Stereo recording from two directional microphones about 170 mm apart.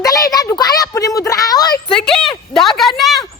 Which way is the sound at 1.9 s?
5° left (ahead or behind).